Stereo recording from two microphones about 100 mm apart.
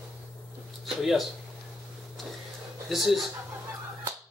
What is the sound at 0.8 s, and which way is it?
Speech, centre (ahead or behind).